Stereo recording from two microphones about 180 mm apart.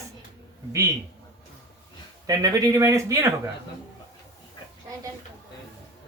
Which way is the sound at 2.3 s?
20° right (ahead or behind).